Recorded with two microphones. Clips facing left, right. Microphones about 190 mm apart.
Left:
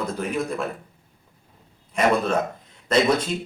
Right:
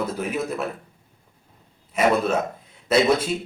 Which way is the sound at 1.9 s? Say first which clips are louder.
Right 1 dB; 5° right (ahead or behind).